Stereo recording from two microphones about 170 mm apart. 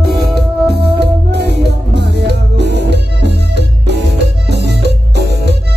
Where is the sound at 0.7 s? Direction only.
75° right (ahead or behind).